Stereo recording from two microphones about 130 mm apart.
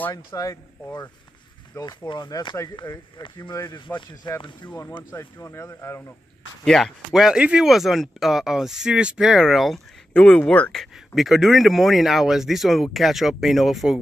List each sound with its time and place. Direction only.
0.1 s speech: 30° left (ahead or behind)
1.8 s speech: 30° left (ahead or behind)
5.1 s speech: 20° left (ahead or behind)
6.6 s speech: centre (ahead or behind)